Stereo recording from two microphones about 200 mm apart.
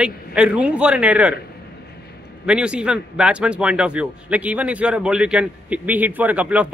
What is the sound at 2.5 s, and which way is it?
Speech, 5° right (ahead or behind).